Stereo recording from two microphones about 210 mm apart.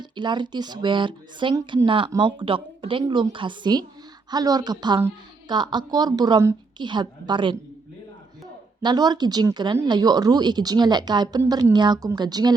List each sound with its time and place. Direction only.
0.0 s speech: 20° right (ahead or behind)
8.8 s speech: 20° right (ahead or behind)